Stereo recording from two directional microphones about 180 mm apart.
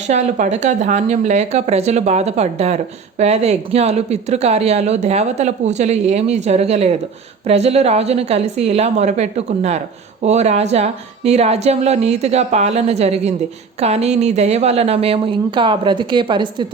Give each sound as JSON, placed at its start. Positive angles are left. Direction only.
{"t": 0.1, "sound": "speech", "side_deg": -40}